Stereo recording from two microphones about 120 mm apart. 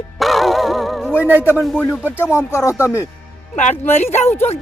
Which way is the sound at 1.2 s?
15° right (ahead or behind).